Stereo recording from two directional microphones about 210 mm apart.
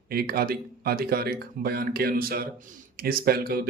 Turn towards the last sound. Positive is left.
turn(degrees=-45)  # may be behind; listen again after turning